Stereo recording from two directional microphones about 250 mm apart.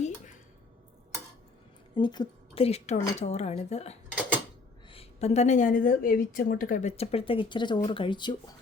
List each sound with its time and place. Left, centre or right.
2.0 s a woman's voice: centre